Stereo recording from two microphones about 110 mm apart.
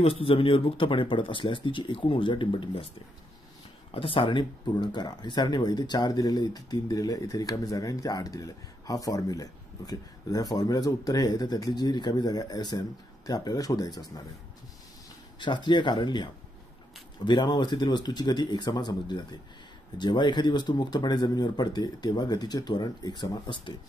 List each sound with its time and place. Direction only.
0.0 s speech: 60° left (ahead or behind)
3.9 s speech: 55° left (ahead or behind); by 14.0 s 35° left (ahead or behind)
15.3 s speech: 45° left (ahead or behind)